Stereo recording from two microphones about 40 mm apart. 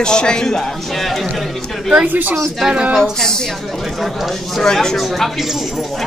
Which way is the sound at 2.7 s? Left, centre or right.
Right.